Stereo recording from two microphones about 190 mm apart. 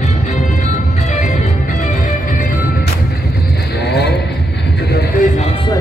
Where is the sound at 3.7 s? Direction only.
60° left (ahead or behind).